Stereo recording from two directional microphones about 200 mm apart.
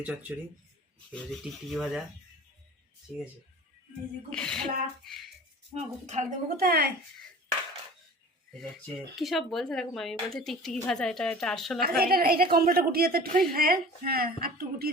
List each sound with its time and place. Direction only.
0.0 s speech: 10° right (ahead or behind)
4.3 s speech: 5° left (ahead or behind)
5.7 s a woman's voice: 35° right (ahead or behind)
6.6 s a woman's voice: 50° right (ahead or behind)
9.1 s speech: centre (ahead or behind)
11.8 s a woman's voice: 50° right (ahead or behind)